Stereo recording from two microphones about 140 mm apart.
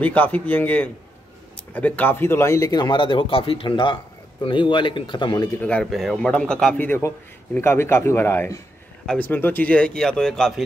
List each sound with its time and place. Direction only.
0.0 s a man's voice: 10° left (ahead or behind); by 5.5 s 35° left (ahead or behind)
5.6 s a man's voice: 10° left (ahead or behind)
5.9 s a man's voice: centre (ahead or behind)